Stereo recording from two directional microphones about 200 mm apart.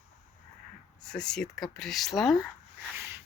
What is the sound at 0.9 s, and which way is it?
Speech, 5° left (ahead or behind).